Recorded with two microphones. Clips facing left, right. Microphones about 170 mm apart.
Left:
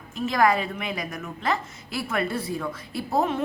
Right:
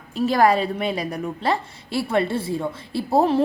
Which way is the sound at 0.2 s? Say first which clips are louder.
Right 4 dB; 35° right (ahead or behind).